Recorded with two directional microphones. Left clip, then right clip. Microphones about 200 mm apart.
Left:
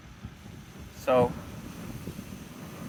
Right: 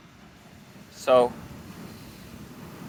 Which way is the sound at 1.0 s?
40° right (ahead or behind).